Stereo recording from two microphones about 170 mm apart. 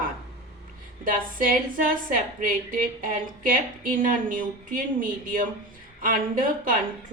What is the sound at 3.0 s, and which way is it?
Speech, 55° right (ahead or behind).